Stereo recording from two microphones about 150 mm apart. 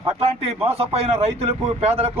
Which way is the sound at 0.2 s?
40° right (ahead or behind).